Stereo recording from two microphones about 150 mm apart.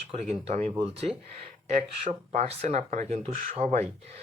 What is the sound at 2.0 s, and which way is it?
Speech, 45° right (ahead or behind).